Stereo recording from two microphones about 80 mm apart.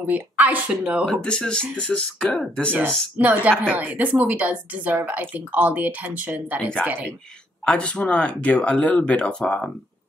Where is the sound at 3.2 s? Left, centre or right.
Centre.